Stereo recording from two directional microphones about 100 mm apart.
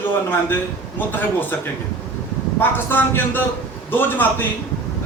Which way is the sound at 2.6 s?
20° left (ahead or behind).